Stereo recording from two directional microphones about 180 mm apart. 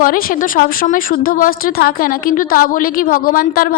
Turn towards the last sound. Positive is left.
turn(degrees=55)  # may be behind; listen again after turning